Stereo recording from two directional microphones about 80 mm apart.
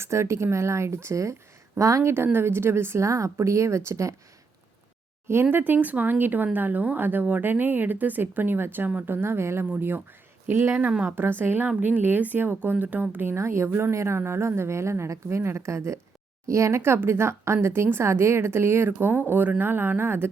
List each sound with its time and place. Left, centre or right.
0.0 s speech: right
5.3 s speech: right